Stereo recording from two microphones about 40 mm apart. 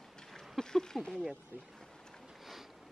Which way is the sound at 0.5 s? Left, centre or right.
Centre.